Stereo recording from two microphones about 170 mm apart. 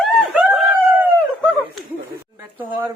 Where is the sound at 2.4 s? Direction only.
10° right (ahead or behind).